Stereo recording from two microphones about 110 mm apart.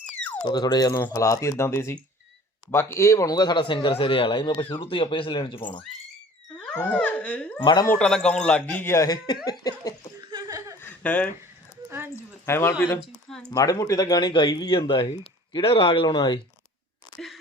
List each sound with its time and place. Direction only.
0.4 s speech: 40° left (ahead or behind)
0.9 s speech: 25° left (ahead or behind); by 5.8 s 45° left (ahead or behind)
6.7 s a man's voice: 15° left (ahead or behind)
7.6 s speech: 45° left (ahead or behind)
7.9 s a man's voice: 5° left (ahead or behind)
9.0 s speech: 40° left (ahead or behind)
10.2 s chuckle: 35° right (ahead or behind)
10.8 s chuckle: 15° left (ahead or behind)
11.9 s a sound: 20° right (ahead or behind)
12.5 s speech: 25° left (ahead or behind); by 16.0 s 55° left (ahead or behind)
16.0 s speech: 40° left (ahead or behind)
17.2 s a sound: centre (ahead or behind)